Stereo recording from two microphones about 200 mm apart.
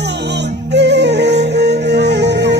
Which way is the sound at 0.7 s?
60° right (ahead or behind).